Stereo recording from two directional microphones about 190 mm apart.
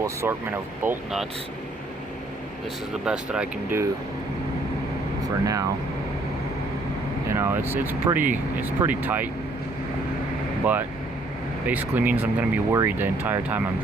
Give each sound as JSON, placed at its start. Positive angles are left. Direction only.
{"t": 0.0, "sound": "speech", "side_deg": -15}
{"t": 3.0, "sound": "speech", "side_deg": -5}
{"t": 5.3, "sound": "speech", "side_deg": -20}
{"t": 7.3, "sound": "speech", "side_deg": -10}
{"t": 11.6, "sound": "speech", "side_deg": -10}